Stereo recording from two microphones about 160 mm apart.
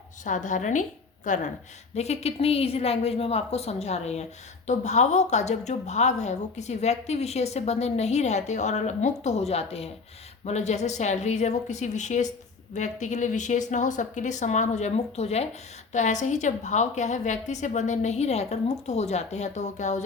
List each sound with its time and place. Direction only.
0.3 s a woman's voice: 50° left (ahead or behind)